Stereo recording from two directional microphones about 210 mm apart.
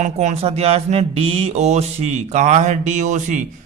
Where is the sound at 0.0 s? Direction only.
35° right (ahead or behind).